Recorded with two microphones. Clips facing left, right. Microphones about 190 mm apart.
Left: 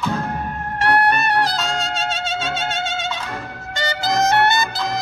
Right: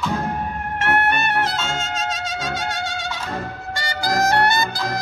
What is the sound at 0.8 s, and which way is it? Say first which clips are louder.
Music: left 3 dB; 35° left (ahead or behind).